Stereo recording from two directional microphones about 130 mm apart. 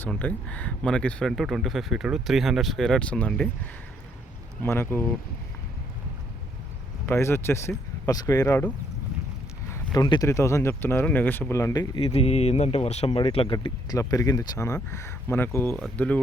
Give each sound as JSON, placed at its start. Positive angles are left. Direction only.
{"t": 0.0, "sound": "speech", "side_deg": 10}
{"t": 7.0, "sound": "speech", "side_deg": 20}
{"t": 9.6, "sound": "a sound", "side_deg": 20}
{"t": 10.0, "sound": "speech", "side_deg": 35}
{"t": 10.2, "sound": "speech", "side_deg": 20}
{"t": 11.9, "sound": "speech", "side_deg": 50}
{"t": 13.1, "sound": "speech", "side_deg": 45}
{"t": 13.7, "sound": "speech", "side_deg": 25}